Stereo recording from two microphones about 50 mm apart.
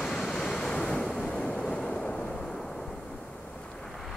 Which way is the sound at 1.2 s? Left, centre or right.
Left.